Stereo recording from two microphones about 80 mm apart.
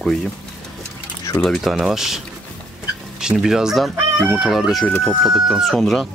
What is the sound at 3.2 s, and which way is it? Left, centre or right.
Speech, centre.